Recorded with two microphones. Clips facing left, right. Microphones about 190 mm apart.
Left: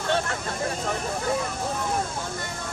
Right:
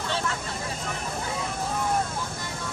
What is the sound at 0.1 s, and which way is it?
Vehicle, 55° left (ahead or behind).